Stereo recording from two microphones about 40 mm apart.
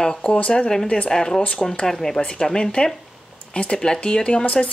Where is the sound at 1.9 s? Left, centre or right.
Centre.